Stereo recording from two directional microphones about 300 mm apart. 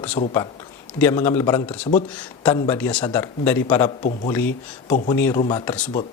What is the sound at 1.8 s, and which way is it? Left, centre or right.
Speech, left.